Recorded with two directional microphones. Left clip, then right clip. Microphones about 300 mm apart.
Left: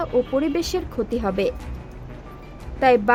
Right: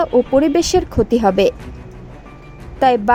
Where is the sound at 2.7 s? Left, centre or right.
Centre.